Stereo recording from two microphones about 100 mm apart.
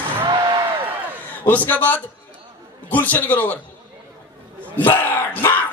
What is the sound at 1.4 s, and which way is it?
Speech, 15° left (ahead or behind).